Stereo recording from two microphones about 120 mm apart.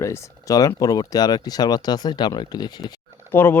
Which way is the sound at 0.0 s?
25° left (ahead or behind).